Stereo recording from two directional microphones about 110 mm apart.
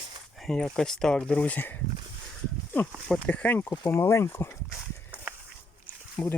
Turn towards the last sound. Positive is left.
turn(degrees=15)  # may be behind; listen again after turning